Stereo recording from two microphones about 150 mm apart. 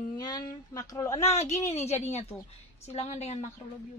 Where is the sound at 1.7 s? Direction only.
45° left (ahead or behind).